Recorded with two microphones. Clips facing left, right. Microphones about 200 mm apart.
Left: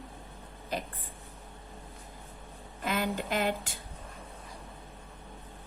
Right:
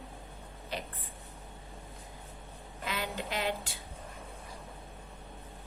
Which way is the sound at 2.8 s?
50° left (ahead or behind).